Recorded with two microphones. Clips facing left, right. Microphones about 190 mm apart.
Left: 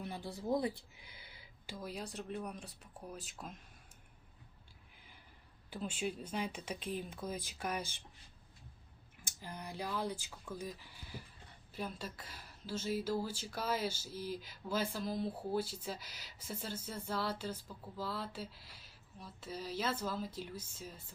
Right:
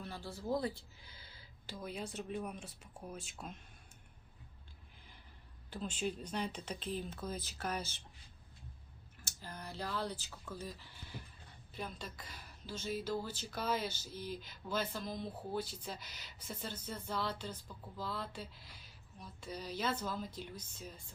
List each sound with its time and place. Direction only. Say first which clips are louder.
0.0 s speech: left 2 dB; 20° left (ahead or behind)
1.7 s speech: right 1 dB; centre (ahead or behind)
5.7 s a woman's voice: even; 10° left (ahead or behind)
9.2 s a woman's voice: left 1 dB; 15° left (ahead or behind)